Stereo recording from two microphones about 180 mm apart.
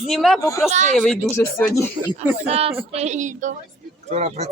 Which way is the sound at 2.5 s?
35° right (ahead or behind).